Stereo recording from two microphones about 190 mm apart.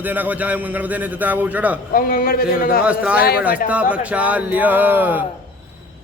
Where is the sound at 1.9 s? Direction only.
50° left (ahead or behind).